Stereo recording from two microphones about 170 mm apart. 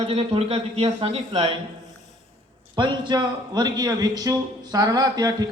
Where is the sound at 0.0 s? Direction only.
35° right (ahead or behind).